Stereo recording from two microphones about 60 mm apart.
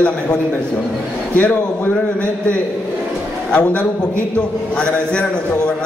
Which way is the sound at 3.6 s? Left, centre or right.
Left.